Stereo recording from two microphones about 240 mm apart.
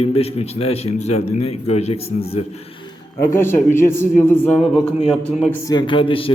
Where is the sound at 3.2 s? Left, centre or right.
Centre.